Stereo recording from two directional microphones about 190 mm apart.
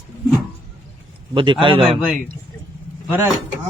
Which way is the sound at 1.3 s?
25° right (ahead or behind).